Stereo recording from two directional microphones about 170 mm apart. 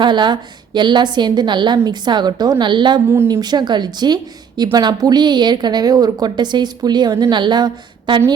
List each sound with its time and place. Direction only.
0.0 s a woman's voice: 25° right (ahead or behind)
3.1 s a woman's voice: 15° right (ahead or behind)